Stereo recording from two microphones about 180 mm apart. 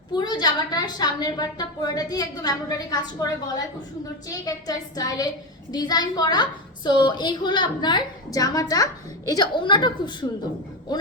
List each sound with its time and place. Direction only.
0.2 s a woman's voice: 25° left (ahead or behind)
4.3 s a woman's voice: 20° left (ahead or behind)